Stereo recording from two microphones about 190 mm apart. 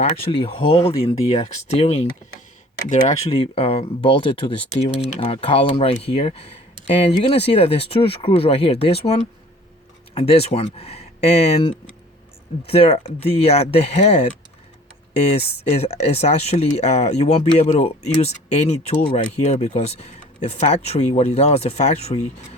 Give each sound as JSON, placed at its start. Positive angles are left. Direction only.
{"t": 0.3, "sound": "speech", "side_deg": 30}